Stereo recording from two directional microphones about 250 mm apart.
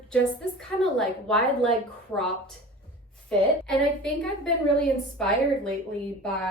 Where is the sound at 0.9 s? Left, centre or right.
Centre.